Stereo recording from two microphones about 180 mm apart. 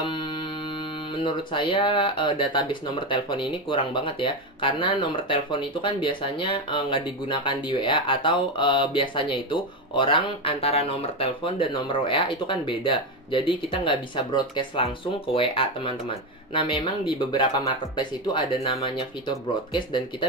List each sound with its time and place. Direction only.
1.2 s speech: 30° left (ahead or behind)